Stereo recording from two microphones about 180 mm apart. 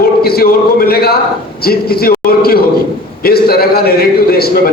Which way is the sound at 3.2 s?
60° left (ahead or behind).